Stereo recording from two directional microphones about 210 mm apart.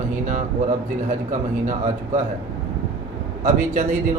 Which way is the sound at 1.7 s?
35° right (ahead or behind).